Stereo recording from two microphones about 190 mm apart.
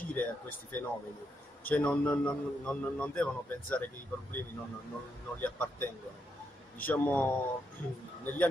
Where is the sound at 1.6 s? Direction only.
5° left (ahead or behind).